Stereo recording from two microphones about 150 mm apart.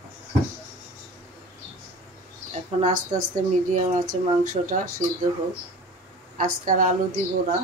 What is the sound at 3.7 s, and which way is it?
Speech, 60° right (ahead or behind).